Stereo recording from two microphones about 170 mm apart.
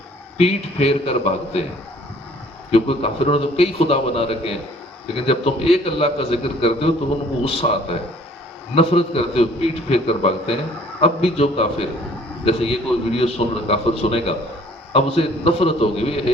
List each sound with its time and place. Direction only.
0.3 s a man's voice: 35° left (ahead or behind)
2.6 s a man's voice: 35° left (ahead or behind)